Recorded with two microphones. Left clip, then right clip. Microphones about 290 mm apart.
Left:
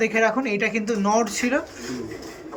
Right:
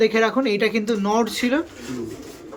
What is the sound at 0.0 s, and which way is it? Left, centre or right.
Speech, centre.